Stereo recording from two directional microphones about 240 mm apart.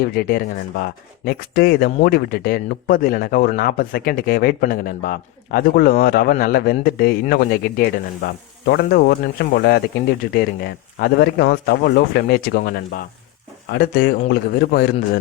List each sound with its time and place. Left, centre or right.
0.0 s speech: left